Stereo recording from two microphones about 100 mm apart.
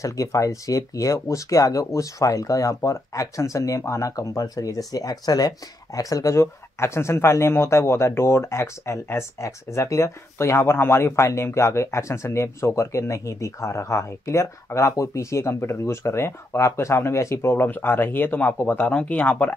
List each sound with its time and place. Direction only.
0.0 s speech: 35° left (ahead or behind); by 19.5 s 15° left (ahead or behind)